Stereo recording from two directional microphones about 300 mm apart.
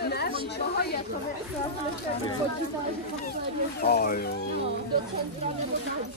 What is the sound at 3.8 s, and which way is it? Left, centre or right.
Speech, left.